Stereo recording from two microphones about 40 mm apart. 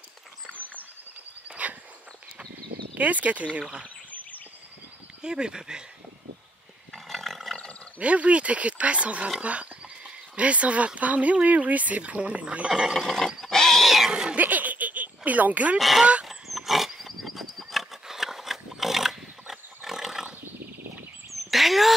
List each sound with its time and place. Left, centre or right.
1.5 s walk: right
2.9 s speech: right
5.2 s speech: right
6.9 s roar: centre
8.0 s speech: right
12.6 s speech: right
12.9 s pig: centre
13.8 s cat: centre
14.3 s a sound: right
16.3 s pig: centre
18.0 s a sound: centre
21.3 s a sound: centre